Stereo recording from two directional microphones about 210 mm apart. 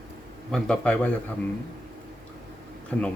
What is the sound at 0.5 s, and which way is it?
Speech, 5° left (ahead or behind).